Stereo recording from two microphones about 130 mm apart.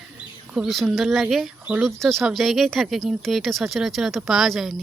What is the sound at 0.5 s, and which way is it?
Speech, centre (ahead or behind).